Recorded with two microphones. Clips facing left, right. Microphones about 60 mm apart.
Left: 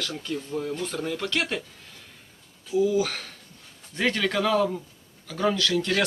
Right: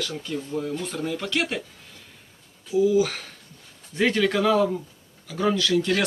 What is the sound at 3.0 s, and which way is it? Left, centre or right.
Speech, centre.